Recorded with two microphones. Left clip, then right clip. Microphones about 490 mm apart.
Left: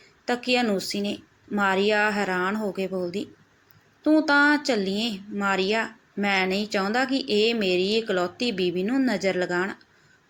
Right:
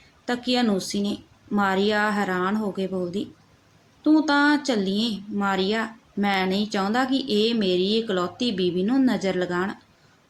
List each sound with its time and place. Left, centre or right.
0.3 s speech: right